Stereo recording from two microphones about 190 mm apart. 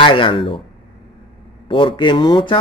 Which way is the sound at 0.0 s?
25° left (ahead or behind).